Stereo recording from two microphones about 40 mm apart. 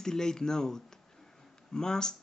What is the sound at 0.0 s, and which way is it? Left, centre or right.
Speech, centre.